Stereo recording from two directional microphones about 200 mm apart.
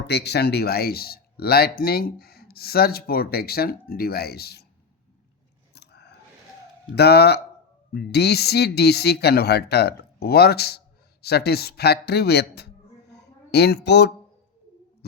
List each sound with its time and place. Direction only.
0.1 s speech: 55° left (ahead or behind)
5.7 s scissors: 55° left (ahead or behind)
6.9 s speech: 55° left (ahead or behind)